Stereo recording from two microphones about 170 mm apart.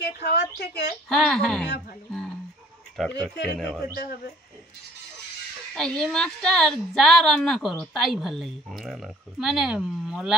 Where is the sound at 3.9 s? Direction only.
70° left (ahead or behind).